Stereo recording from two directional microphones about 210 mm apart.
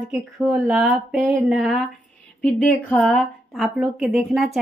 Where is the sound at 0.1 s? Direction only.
5° right (ahead or behind).